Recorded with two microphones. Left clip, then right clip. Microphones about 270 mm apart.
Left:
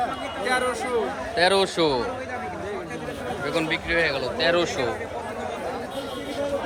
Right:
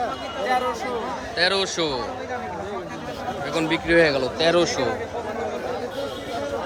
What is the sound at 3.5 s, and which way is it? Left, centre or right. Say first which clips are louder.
Speech: right 5 dB; centre.